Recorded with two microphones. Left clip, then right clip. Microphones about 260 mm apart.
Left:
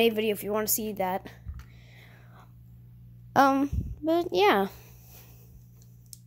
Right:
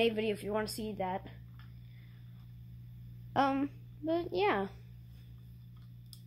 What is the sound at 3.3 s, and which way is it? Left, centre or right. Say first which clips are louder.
A woman's voice: left 9 dB; left.